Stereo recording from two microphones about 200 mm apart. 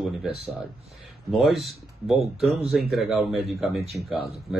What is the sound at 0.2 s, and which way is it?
Speech, centre (ahead or behind).